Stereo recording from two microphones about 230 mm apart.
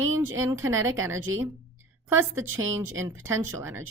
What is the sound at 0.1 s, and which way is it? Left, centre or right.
Speech, centre.